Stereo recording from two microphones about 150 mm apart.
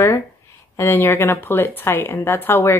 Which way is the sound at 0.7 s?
15° left (ahead or behind).